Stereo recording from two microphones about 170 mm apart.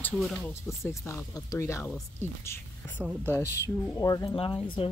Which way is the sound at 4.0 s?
20° left (ahead or behind).